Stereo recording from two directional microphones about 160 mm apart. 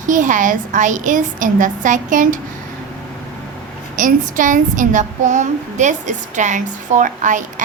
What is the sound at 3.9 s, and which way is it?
A woman's voice, 55° right (ahead or behind).